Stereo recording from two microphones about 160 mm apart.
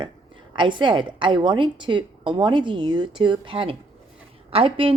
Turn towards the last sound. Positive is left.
turn(degrees=-35)  # may be behind; listen again after turning